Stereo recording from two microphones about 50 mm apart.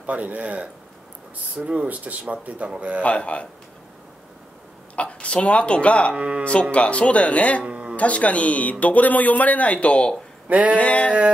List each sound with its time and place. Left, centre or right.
0.0 s speech: right
3.0 s speech: left
4.9 s speech: left
6.1 s speech: right
6.7 s speech: left
7.6 s music: right
7.9 s speech: left
10.5 s speech: right
10.8 s speech: left